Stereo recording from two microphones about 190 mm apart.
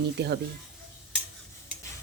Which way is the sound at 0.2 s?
60° right (ahead or behind).